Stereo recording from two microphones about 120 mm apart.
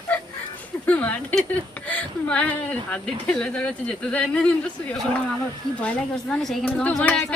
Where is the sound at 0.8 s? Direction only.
10° left (ahead or behind).